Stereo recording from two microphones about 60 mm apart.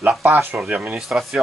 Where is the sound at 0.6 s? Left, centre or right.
Right.